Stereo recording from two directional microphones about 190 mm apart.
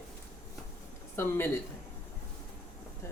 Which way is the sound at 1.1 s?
10° left (ahead or behind).